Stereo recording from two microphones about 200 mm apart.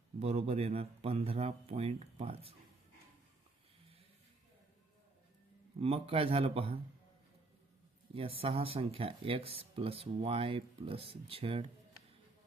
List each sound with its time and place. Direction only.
0.2 s speech: 30° right (ahead or behind)
5.8 s speech: 30° right (ahead or behind)
8.4 s speech: 30° right (ahead or behind)